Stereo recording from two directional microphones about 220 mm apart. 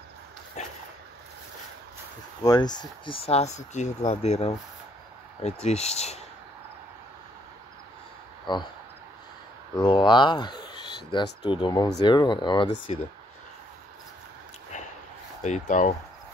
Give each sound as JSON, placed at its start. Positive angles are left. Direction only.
{"t": 0.6, "sound": "a sound", "side_deg": 30}
{"t": 2.4, "sound": "speech", "side_deg": 20}
{"t": 8.5, "sound": "speech", "side_deg": 20}
{"t": 9.8, "sound": "speech", "side_deg": 20}
{"t": 15.4, "sound": "speech", "side_deg": 35}